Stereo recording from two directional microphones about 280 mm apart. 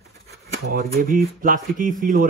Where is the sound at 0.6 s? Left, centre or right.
Right.